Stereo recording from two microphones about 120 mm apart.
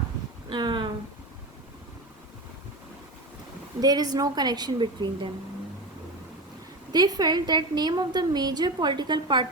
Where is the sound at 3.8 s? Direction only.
35° right (ahead or behind).